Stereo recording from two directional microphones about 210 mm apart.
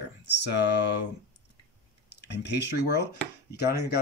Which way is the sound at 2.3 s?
55° left (ahead or behind).